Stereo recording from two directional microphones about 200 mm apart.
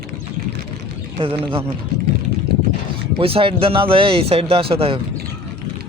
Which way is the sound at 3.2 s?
30° right (ahead or behind).